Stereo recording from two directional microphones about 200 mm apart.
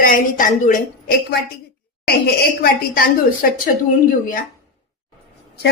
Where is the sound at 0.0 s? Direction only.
40° left (ahead or behind).